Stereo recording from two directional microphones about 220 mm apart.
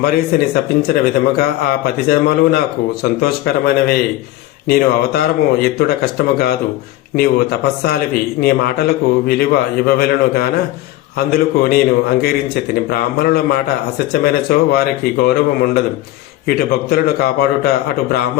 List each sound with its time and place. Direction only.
0.0 s speech: 45° left (ahead or behind)